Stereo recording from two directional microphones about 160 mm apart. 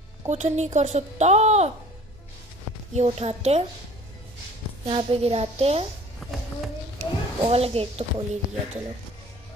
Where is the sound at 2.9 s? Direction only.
45° right (ahead or behind).